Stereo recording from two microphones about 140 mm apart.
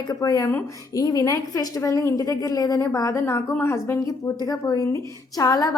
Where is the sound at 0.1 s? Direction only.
25° left (ahead or behind).